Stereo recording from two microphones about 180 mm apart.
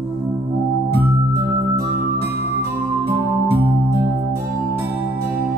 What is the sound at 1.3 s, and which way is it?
Music, 15° right (ahead or behind).